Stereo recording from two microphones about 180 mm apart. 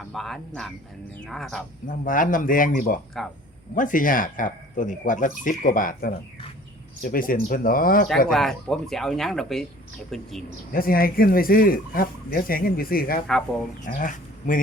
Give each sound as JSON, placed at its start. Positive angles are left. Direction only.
{"t": 0.1, "sound": "speech", "side_deg": 0}
{"t": 1.9, "sound": "speech", "side_deg": 50}
{"t": 8.3, "sound": "speech", "side_deg": 0}
{"t": 10.7, "sound": "speech", "side_deg": 55}